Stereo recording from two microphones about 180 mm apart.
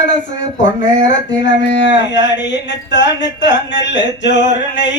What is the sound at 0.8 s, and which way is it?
Speech, 85° left.